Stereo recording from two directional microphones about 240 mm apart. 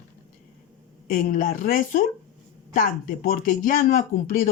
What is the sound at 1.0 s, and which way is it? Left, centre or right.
Speech, left.